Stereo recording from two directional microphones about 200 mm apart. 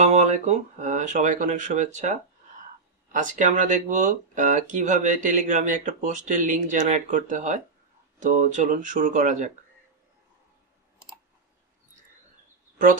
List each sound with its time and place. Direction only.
0.0 s speech: 35° right (ahead or behind)